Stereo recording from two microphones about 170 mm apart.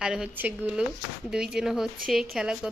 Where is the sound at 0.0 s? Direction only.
5° right (ahead or behind).